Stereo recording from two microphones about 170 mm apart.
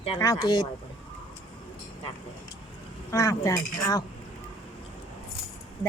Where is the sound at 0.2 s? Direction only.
25° left (ahead or behind).